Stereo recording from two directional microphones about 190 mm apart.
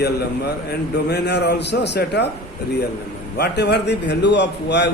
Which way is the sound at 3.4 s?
60° left (ahead or behind).